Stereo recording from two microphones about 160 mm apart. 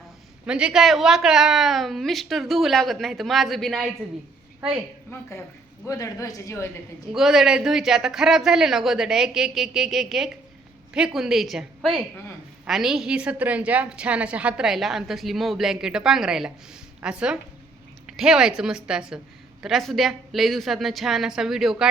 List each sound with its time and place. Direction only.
0.4 s a woman's voice: 5° right (ahead or behind)
5.8 s a woman's voice: 20° left (ahead or behind)
7.1 s a woman's voice: centre (ahead or behind)